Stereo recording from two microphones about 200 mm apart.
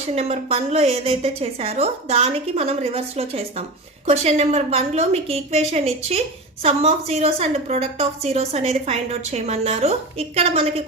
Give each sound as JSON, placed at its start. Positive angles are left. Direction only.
{"t": 0.2, "sound": "a woman's voice", "side_deg": -30}